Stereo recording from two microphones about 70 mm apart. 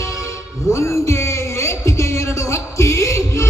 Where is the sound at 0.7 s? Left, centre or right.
Left.